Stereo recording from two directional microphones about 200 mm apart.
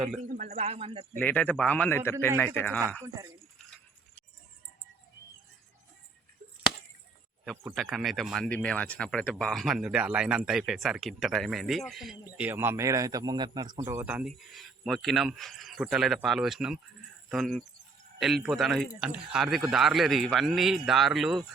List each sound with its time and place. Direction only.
0.3 s a man's voice: 35° right (ahead or behind)
1.2 s a man's voice: 5° left (ahead or behind)
7.6 s speech: centre (ahead or behind)
12.5 s speech: 10° right (ahead or behind)